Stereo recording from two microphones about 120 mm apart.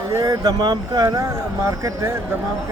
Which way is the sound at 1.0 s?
25° right (ahead or behind).